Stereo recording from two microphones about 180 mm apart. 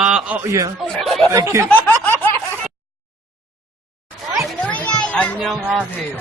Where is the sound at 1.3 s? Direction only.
15° right (ahead or behind).